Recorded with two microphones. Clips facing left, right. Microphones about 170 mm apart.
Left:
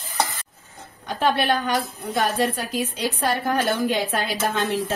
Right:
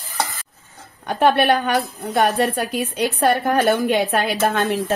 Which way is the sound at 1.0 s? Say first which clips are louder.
Right 5 dB; 60° right (ahead or behind).